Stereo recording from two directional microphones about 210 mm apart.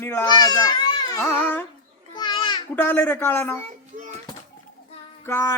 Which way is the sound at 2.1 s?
20° left (ahead or behind).